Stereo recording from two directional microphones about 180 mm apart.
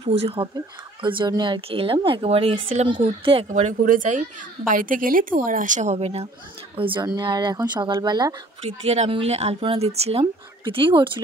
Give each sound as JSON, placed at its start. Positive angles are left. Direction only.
{"t": 0.0, "sound": "a woman's voice", "side_deg": -35}
{"t": 8.6, "sound": "speech", "side_deg": -35}